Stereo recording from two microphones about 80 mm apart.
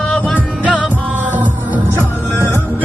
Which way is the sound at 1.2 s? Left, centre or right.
Right.